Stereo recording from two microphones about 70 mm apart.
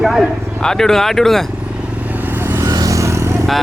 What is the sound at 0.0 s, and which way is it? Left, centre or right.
Speech, centre.